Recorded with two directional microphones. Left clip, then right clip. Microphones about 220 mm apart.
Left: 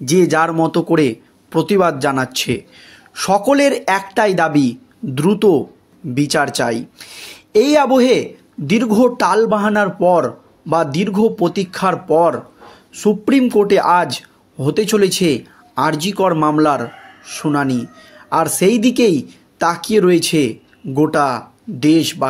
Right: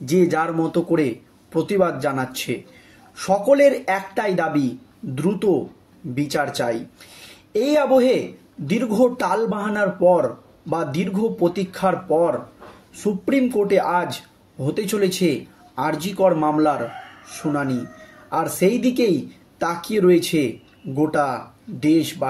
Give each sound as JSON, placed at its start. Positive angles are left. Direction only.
{"t": 0.0, "sound": "speech", "side_deg": 40}